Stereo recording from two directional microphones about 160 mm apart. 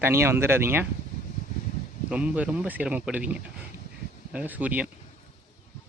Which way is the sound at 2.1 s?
10° right (ahead or behind).